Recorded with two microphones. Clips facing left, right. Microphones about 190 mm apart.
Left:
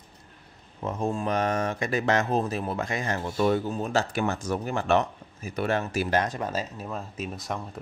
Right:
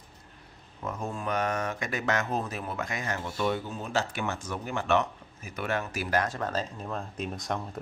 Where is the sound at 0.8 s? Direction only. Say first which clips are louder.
Left 5 dB; 25° left (ahead or behind).